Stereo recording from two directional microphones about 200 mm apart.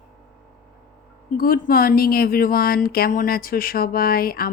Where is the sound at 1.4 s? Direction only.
45° left (ahead or behind).